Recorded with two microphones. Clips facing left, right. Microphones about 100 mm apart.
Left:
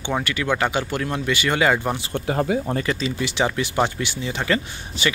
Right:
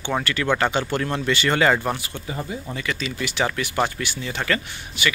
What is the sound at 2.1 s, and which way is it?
Speech, 70° left (ahead or behind).